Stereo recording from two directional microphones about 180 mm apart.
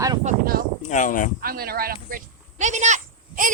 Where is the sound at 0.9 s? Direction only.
45° left (ahead or behind).